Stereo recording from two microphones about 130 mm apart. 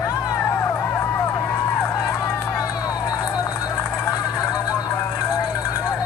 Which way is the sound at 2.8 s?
25° left (ahead or behind).